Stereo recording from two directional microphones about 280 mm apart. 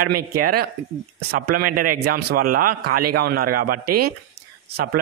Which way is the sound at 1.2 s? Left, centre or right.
Right.